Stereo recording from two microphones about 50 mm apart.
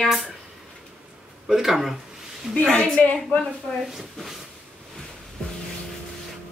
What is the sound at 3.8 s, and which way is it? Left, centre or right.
Speech, centre.